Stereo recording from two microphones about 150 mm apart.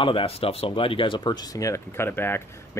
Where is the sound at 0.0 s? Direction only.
35° left (ahead or behind).